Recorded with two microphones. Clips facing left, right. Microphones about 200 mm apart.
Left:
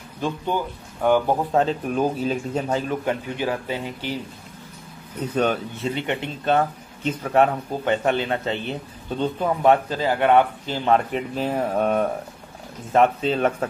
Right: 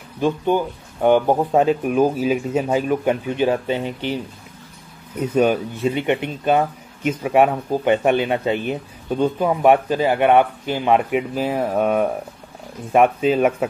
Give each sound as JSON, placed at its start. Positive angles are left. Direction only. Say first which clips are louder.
{"t": 0.5, "sound": "speech", "louder": "right 6 dB", "side_deg": -20}
{"t": 3.1, "sound": "speech", "louder": "right 6 dB", "side_deg": -20}
{"t": 5.2, "sound": "speech", "louder": "right 5 dB", "side_deg": -10}